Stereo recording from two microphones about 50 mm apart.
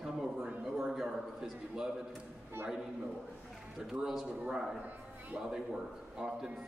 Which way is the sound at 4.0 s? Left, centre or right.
Centre.